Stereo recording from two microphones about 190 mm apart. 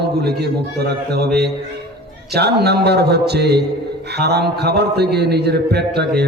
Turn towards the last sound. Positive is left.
turn(degrees=-60)  # may be behind; listen again after turning